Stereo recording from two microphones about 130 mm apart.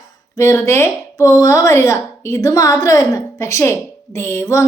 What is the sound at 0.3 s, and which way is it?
A woman's voice, 20° left (ahead or behind).